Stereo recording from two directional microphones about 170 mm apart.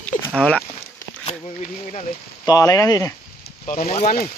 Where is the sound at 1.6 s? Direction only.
40° left (ahead or behind).